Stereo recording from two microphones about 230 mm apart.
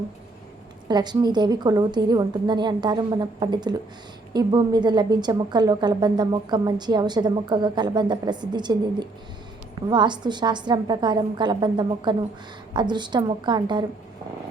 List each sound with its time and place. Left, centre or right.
0.9 s a woman's voice: centre